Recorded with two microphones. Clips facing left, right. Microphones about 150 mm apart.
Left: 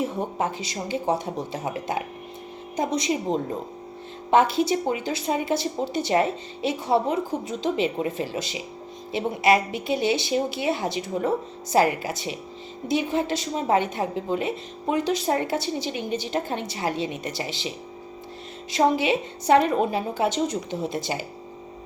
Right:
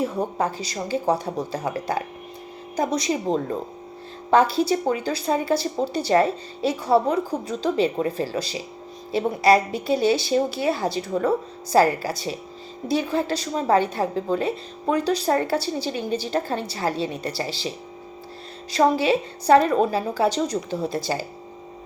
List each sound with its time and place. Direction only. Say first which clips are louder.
0.3 s a woman's voice: right 2 dB; 20° left (ahead or behind)
4.3 s a woman's voice: right 1 dB; 20° left (ahead or behind)
18.7 s a woman's voice: right 2 dB; 20° left (ahead or behind)